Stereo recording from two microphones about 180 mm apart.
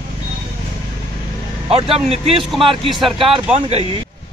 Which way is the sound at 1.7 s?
30° right (ahead or behind).